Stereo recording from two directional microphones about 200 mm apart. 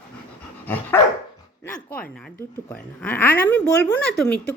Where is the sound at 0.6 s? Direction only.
10° left (ahead or behind).